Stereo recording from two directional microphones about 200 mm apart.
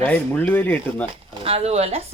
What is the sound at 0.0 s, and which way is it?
Speech, 10° left (ahead or behind).